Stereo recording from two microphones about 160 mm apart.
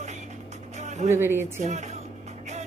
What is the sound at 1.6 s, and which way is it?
Speech, 45° right (ahead or behind).